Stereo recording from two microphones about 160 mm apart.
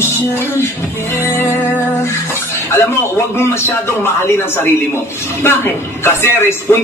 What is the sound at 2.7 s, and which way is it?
Speech, 15° left (ahead or behind).